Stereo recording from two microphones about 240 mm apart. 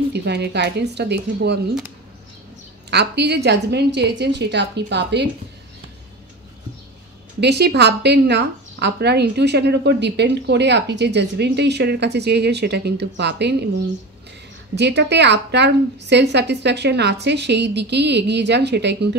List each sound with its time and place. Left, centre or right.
0.1 s a woman's voice: right
2.9 s a woman's voice: right
7.3 s a woman's voice: right
14.8 s a woman's voice: right